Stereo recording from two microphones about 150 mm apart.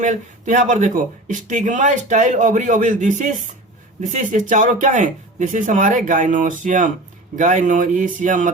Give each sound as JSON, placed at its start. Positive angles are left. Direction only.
{"t": 0.0, "sound": "speech", "side_deg": -55}